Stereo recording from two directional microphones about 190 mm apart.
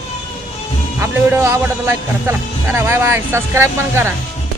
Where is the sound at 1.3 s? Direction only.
10° right (ahead or behind).